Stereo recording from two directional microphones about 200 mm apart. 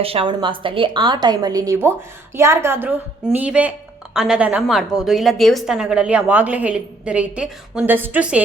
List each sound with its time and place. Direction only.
0.0 s a woman's voice: 30° right (ahead or behind); by 8.4 s 5° right (ahead or behind)